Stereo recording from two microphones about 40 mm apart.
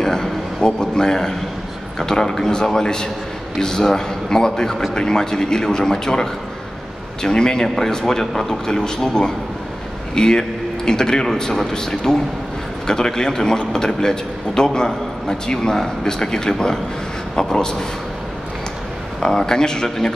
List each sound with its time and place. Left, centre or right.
0.0 s a sound: centre
0.6 s a man's voice: centre
19.1 s a man's voice: centre